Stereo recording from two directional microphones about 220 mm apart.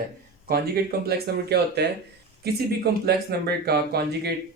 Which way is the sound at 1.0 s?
50° right (ahead or behind).